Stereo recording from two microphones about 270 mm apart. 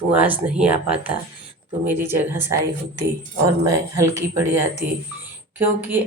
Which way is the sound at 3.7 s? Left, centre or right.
Centre.